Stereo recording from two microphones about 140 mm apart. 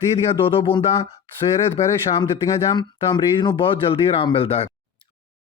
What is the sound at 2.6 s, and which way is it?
Speech, 30° left (ahead or behind).